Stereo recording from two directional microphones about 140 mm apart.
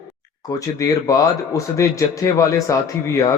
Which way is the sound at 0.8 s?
25° left (ahead or behind).